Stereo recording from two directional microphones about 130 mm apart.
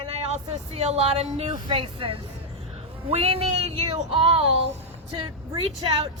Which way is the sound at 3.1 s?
50° right (ahead or behind).